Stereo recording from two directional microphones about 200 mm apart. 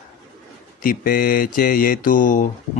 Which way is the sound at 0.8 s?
45° left (ahead or behind).